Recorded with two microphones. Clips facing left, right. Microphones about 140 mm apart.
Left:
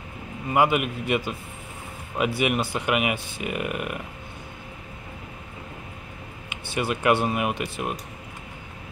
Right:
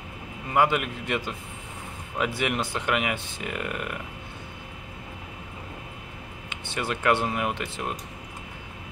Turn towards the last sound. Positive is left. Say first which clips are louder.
# left 2 dB
turn(degrees=10)  # may be behind; listen again after turning